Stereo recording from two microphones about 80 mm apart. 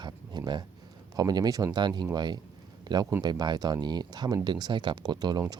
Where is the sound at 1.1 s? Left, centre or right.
Right.